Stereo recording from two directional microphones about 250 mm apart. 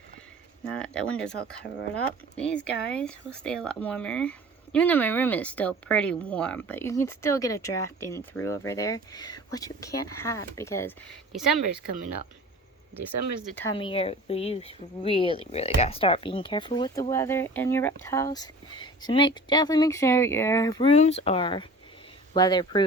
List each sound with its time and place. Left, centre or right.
0.6 s speech: centre
13.1 s speech: right
13.7 s speech: left